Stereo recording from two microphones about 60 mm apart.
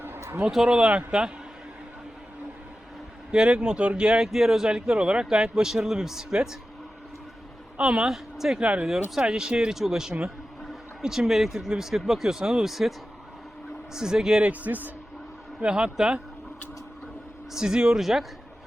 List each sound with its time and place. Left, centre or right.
0.0 s a sound: right
0.5 s speech: centre
3.3 s speech: centre
7.8 s speech: centre
8.6 s a man's voice: centre
13.9 s speech: centre
14.4 s a man's voice: right
15.6 s speech: centre
17.5 s speech: centre